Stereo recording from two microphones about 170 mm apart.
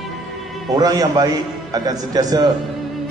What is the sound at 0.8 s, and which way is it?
A man's voice, 25° right (ahead or behind).